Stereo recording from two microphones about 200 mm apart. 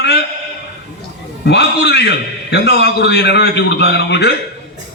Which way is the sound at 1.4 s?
55° left (ahead or behind).